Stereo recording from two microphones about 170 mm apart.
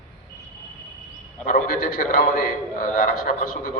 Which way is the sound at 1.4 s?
55° left (ahead or behind).